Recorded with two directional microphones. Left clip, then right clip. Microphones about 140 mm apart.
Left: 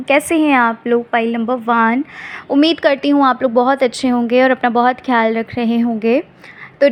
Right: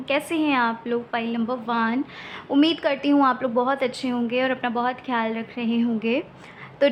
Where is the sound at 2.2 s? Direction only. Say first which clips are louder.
Left 6 dB; 30° left (ahead or behind).